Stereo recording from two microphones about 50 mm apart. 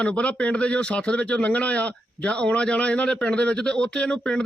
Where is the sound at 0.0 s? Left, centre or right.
Left.